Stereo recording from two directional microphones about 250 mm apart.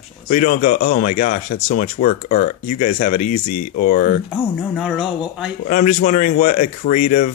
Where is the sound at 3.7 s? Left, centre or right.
Left.